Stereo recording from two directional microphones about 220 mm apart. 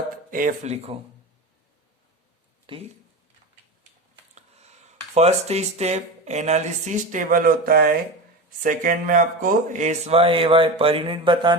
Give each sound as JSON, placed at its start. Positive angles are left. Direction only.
{"t": 0.3, "sound": "speech", "side_deg": -40}
{"t": 2.7, "sound": "speech", "side_deg": -25}
{"t": 4.4, "sound": "speech", "side_deg": -30}